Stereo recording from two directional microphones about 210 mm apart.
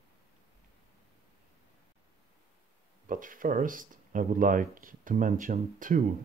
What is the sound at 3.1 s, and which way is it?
Speech, 40° right (ahead or behind).